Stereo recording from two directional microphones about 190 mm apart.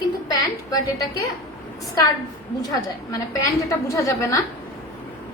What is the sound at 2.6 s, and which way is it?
A woman's voice, 20° left (ahead or behind).